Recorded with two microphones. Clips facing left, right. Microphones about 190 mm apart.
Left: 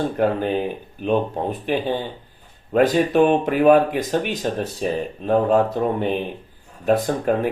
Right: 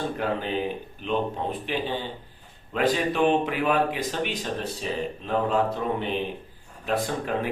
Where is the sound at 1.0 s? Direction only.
50° left (ahead or behind).